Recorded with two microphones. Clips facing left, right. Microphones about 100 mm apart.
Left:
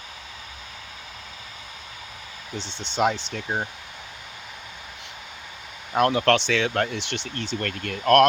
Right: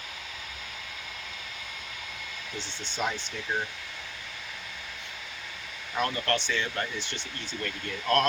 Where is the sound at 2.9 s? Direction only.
70° left (ahead or behind).